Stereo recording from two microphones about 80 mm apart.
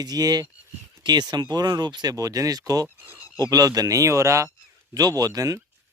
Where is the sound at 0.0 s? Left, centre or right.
Right.